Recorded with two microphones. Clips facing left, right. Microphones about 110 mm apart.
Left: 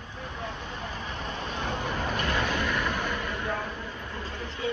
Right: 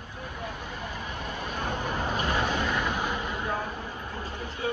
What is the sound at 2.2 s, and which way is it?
Vehicle, 15° right (ahead or behind).